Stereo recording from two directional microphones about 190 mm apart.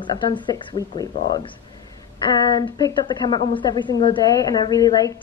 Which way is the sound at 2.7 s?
20° left (ahead or behind).